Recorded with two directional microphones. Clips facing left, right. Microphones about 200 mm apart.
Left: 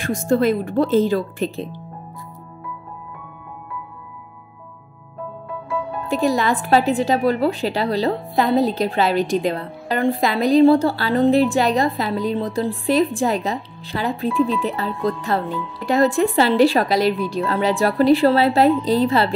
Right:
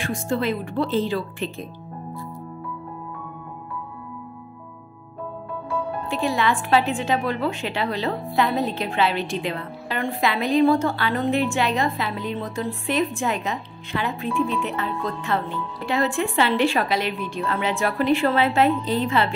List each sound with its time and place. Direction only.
0.0 s speech: 40° left (ahead or behind)
6.0 s a woman's voice: 40° left (ahead or behind)